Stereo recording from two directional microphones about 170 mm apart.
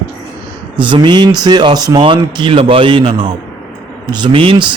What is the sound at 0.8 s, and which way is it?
A man's voice, 30° right (ahead or behind).